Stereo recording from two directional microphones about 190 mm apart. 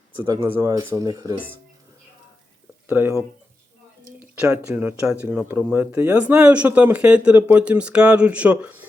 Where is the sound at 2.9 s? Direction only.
10° right (ahead or behind).